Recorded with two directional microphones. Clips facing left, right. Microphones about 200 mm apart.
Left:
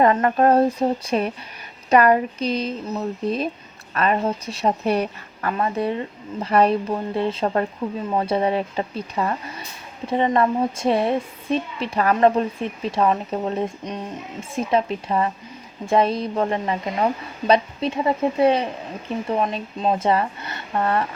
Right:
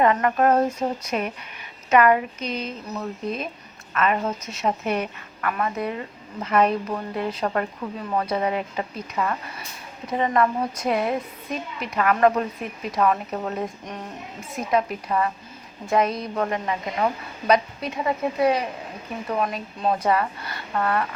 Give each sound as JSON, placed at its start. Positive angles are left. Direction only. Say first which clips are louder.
{"t": 0.0, "sound": "a woman's voice", "louder": "left 2 dB", "side_deg": 35}